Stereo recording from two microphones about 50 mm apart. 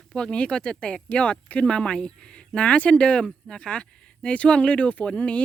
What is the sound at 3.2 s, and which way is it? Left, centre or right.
Speech, centre.